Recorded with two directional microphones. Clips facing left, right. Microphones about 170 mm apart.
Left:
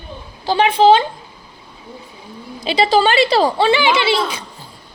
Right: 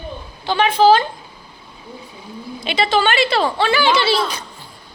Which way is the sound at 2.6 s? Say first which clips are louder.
Left 3 dB; 35° left (ahead or behind).